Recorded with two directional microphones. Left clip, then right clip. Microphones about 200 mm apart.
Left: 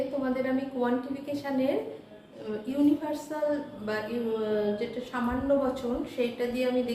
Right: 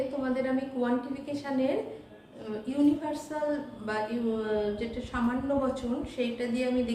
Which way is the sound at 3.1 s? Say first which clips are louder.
Left 2 dB; 5° left (ahead or behind).